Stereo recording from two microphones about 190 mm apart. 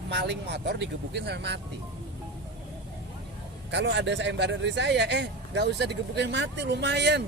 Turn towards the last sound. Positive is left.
turn(degrees=-65)  # may be behind; listen again after turning